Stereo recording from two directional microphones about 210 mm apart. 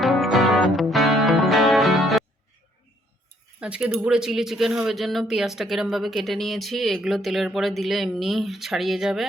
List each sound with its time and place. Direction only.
0.0 s music: centre (ahead or behind)
3.6 s speech: 5° right (ahead or behind)